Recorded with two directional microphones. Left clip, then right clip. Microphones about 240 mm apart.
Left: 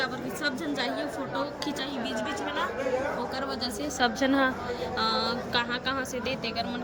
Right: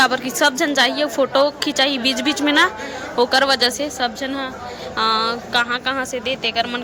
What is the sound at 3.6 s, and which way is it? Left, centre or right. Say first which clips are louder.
A woman's voice: right 9 dB; centre.